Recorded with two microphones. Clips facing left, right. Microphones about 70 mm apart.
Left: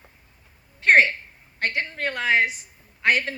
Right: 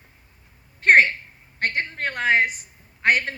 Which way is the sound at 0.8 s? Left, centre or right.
Right.